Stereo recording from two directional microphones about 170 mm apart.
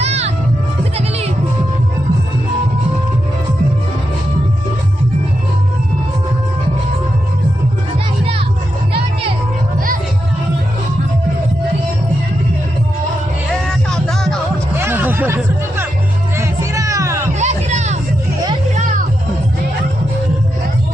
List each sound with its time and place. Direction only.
0.0 s music: 40° right (ahead or behind)
13.5 s music: 5° left (ahead or behind)
14.8 s music: 10° right (ahead or behind)
17.3 s music: 45° right (ahead or behind)